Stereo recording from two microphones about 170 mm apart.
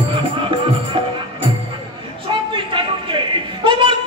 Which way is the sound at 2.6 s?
30° right (ahead or behind).